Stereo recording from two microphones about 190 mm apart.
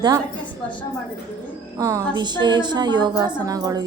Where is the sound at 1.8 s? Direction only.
15° right (ahead or behind).